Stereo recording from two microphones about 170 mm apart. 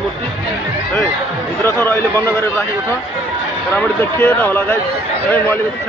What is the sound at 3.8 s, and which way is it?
Speech, 10° left (ahead or behind).